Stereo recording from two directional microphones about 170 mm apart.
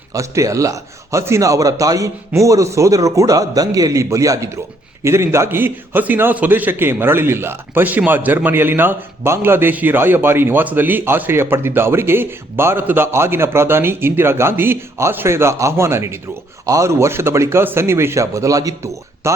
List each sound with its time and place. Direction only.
0.1 s a man's voice: 20° right (ahead or behind)